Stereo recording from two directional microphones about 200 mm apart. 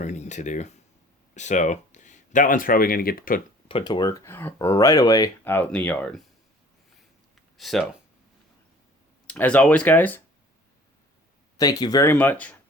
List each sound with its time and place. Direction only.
0.0 s speech: 35° left (ahead or behind)
3.7 s speech: 25° left (ahead or behind); by 6.2 s 5° left (ahead or behind)
7.5 s speech: centre (ahead or behind)
9.2 s speech: 5° left (ahead or behind)
11.5 s speech: 20° left (ahead or behind)